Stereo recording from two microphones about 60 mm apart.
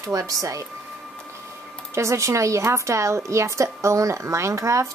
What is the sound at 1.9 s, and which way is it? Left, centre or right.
A woman's voice, right.